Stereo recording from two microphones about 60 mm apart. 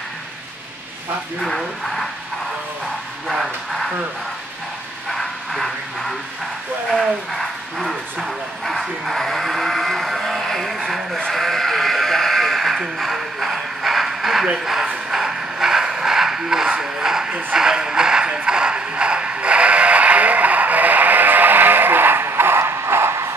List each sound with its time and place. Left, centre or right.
1.4 s speech: centre
3.3 s speech: centre
5.1 s a sound: centre
6.9 s bow-wow: centre
11.1 s sheep: centre
15.0 s a sound: centre; by 23.3 s right